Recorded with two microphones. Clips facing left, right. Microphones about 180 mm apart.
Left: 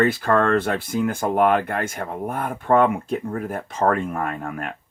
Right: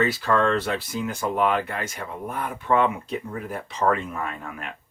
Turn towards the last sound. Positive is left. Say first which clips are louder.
# left 5 dB
turn(degrees=50)  # may be behind; listen again after turning